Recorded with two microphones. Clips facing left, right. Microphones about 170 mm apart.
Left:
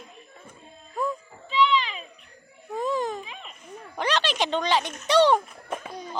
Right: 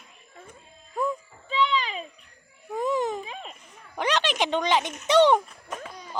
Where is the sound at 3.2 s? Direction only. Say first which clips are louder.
Right 4 dB; 40° right (ahead or behind).